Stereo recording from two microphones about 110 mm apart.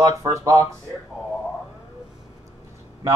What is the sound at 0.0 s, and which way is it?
Speech, 30° right (ahead or behind).